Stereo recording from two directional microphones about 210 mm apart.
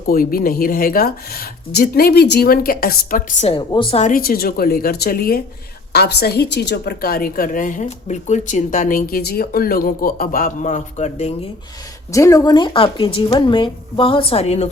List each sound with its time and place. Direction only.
0.1 s a woman's voice: 45° left (ahead or behind)
3.4 s a woman's voice: 25° left (ahead or behind)
3.9 s a woman's voice: 40° left (ahead or behind)
12.1 s a woman's voice: 15° left (ahead or behind)